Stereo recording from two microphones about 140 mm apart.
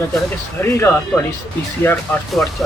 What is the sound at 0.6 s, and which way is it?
Speech, 15° left (ahead or behind).